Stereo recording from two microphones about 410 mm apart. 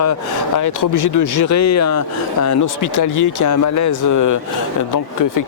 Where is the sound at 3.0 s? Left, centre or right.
Left.